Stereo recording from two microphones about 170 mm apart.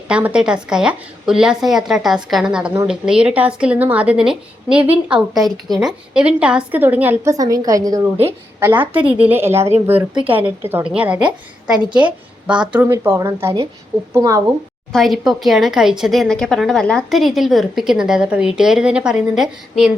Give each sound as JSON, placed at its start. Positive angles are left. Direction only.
{"t": 0.1, "sound": "a woman's voice", "side_deg": -5}
{"t": 14.9, "sound": "speech", "side_deg": 0}